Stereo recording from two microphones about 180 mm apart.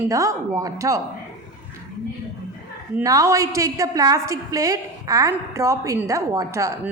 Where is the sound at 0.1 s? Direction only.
20° right (ahead or behind).